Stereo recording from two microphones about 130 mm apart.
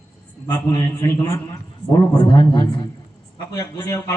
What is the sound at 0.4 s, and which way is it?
Speech, 30° left (ahead or behind).